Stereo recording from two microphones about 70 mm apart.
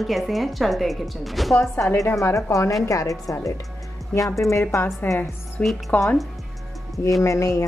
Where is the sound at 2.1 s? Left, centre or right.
Left.